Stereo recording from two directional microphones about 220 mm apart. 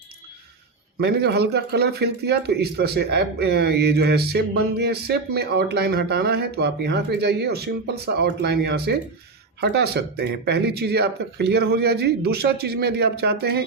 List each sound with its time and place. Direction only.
1.0 s a man's voice: 50° right (ahead or behind)